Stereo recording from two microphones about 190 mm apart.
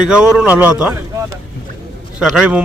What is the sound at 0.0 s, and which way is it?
Speech, 5° right (ahead or behind).